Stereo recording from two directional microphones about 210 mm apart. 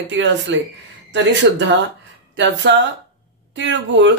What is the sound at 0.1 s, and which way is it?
Speech, 60° right (ahead or behind).